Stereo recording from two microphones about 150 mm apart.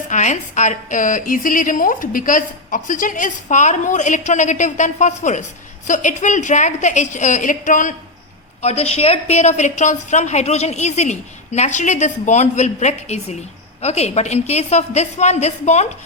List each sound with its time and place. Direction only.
0.1 s a woman's voice: 55° left (ahead or behind)
8.6 s a woman's voice: 40° left (ahead or behind)